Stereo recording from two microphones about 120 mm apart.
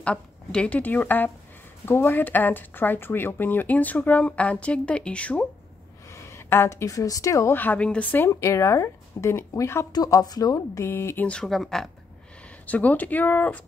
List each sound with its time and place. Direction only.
0.0 s speech: 10° left (ahead or behind)
6.1 s speech: 25° left (ahead or behind)
8.3 s speech: 25° left (ahead or behind)
11.2 s speech: 5° left (ahead or behind)
12.6 s speech: 15° left (ahead or behind)